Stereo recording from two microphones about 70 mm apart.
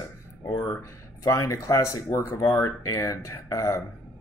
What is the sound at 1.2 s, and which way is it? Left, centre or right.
Speech, left.